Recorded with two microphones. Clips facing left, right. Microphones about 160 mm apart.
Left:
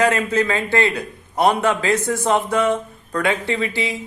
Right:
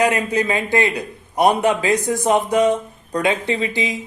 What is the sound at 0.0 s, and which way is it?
A man's voice, 15° right (ahead or behind).